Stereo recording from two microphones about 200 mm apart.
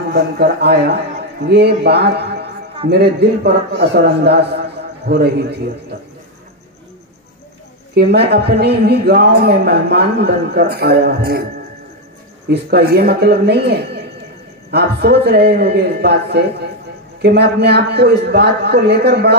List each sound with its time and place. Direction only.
0.1 s a man's voice: 55° right (ahead or behind)
7.9 s speech: 55° right (ahead or behind)
12.4 s a man's voice: 50° right (ahead or behind)